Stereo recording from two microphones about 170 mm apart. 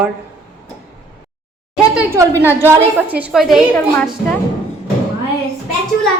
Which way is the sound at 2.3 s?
15° left (ahead or behind).